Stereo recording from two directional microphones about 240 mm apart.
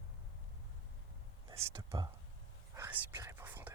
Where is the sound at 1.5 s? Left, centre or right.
Centre.